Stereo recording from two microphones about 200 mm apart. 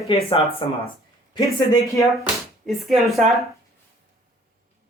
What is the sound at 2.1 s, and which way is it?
Speech, centre (ahead or behind).